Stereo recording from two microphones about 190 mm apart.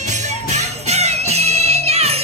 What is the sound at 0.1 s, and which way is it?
Music, 40° right (ahead or behind).